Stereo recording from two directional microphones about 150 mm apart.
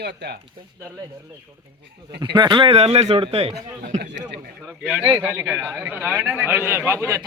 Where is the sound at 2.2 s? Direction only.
30° right (ahead or behind).